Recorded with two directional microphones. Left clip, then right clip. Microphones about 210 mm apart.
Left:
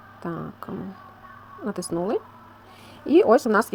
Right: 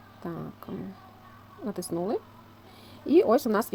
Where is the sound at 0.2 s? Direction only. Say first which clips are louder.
Left 5 dB; 15° left (ahead or behind).